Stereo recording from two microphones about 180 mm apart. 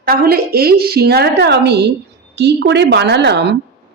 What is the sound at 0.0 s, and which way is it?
A woman's voice, 55° right (ahead or behind).